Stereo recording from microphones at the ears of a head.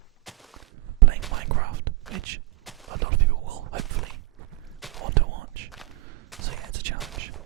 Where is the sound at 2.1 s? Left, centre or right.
Right.